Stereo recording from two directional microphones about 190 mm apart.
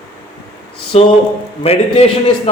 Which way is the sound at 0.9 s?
35° left (ahead or behind).